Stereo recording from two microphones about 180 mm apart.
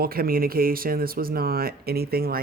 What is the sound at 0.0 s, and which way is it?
Speech, 55° right (ahead or behind).